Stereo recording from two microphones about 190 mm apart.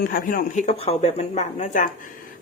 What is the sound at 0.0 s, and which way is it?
Speech, 50° left (ahead or behind).